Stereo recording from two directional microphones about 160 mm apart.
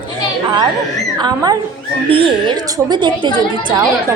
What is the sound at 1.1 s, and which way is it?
A woman's voice, 25° right (ahead or behind).